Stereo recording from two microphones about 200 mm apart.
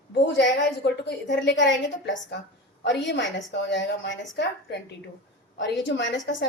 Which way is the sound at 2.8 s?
60° left (ahead or behind).